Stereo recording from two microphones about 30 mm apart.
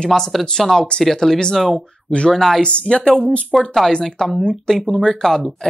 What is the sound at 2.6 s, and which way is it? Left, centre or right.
Speech, left.